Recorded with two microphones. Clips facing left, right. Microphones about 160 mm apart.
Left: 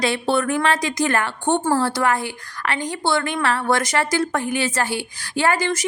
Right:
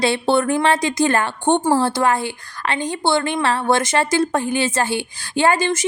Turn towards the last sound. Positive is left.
turn(degrees=-25)  # may be behind; listen again after turning